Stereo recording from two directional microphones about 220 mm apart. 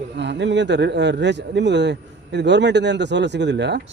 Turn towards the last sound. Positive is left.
turn(degrees=-50)  # may be behind; listen again after turning